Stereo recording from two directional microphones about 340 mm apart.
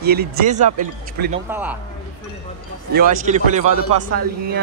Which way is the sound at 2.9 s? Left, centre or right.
Right.